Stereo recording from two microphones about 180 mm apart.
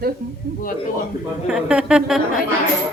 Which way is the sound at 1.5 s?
5° right (ahead or behind).